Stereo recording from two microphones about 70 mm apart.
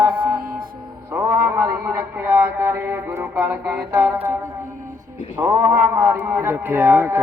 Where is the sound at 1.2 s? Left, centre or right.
Right.